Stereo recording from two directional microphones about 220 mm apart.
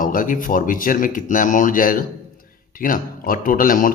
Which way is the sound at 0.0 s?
40° left (ahead or behind).